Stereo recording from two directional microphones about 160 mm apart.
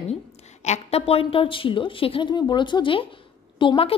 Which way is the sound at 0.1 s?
45° left (ahead or behind).